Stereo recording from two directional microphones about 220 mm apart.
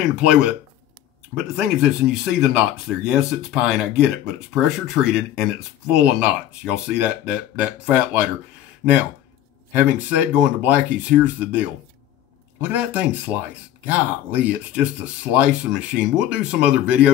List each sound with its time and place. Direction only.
0.2 s speech: 5° right (ahead or behind)
1.6 s speech: 5° right (ahead or behind)
9.8 s speech: 5° right (ahead or behind)